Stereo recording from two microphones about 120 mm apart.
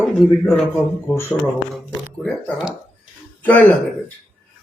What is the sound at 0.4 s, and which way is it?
Speech, centre (ahead or behind).